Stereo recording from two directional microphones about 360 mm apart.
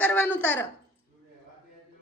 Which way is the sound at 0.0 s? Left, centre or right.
Centre.